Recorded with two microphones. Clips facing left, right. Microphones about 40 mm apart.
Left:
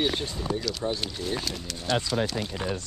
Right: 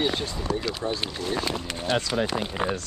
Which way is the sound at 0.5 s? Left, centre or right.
Right.